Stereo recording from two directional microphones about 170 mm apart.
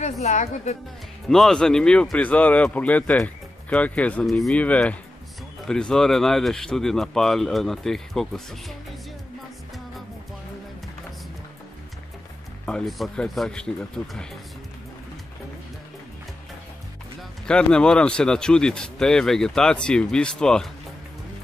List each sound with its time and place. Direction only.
0.0 s a woman's voice: 45° left (ahead or behind)
1.3 s speech: 5° left (ahead or behind)
12.6 s speech: centre (ahead or behind)
17.5 s speech: 5° left (ahead or behind)